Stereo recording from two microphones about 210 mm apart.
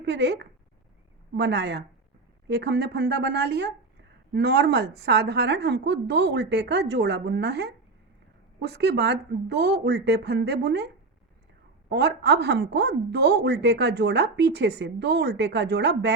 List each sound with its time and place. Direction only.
0.0 s a woman's voice: 55° right (ahead or behind)